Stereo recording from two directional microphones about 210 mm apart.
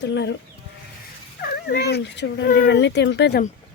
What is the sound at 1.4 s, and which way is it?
Speech, 50° left (ahead or behind).